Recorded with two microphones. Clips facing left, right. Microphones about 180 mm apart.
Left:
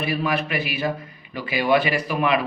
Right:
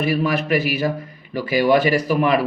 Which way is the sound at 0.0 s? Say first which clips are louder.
Right 4 dB; 45° right (ahead or behind).